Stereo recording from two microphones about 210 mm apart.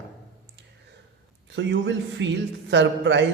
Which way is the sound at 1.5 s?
55° right (ahead or behind).